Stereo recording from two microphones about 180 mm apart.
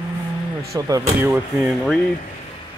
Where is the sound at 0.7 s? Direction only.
20° right (ahead or behind).